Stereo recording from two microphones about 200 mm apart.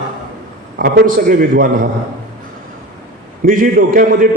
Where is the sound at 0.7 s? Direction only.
45° right (ahead or behind).